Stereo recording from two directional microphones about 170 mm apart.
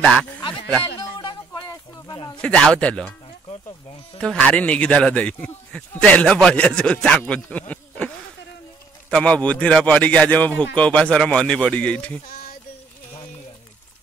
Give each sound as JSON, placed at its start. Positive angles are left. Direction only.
{"t": 0.9, "sound": "a sound", "side_deg": 25}
{"t": 2.3, "sound": "a man's voice", "side_deg": 5}
{"t": 4.2, "sound": "a man's voice", "side_deg": 5}
{"t": 9.1, "sound": "a man's voice", "side_deg": 5}